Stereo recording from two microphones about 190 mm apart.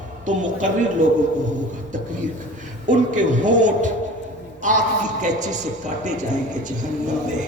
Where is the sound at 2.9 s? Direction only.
40° right (ahead or behind).